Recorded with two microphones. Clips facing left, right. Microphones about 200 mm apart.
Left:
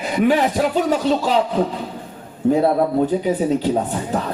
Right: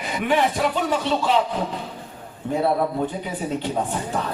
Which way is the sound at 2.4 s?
40° left (ahead or behind).